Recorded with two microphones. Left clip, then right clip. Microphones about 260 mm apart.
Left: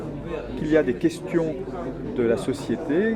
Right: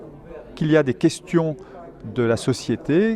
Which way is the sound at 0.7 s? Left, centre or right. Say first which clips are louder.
Right 3 dB; right.